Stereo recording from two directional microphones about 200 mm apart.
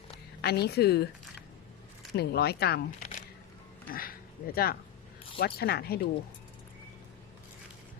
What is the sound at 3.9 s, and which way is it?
Speech, 45° left (ahead or behind).